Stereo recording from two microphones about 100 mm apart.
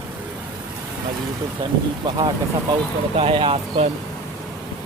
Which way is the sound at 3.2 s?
65° right (ahead or behind).